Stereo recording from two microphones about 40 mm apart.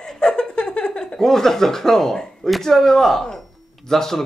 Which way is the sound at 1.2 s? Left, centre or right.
Centre.